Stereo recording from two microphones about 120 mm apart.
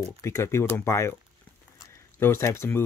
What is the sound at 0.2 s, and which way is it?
Speech, 20° left (ahead or behind).